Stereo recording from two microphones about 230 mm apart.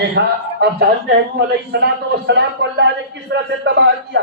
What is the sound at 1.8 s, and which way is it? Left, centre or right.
A man's voice, right.